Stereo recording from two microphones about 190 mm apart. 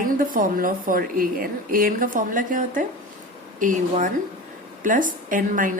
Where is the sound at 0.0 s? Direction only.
45° right (ahead or behind).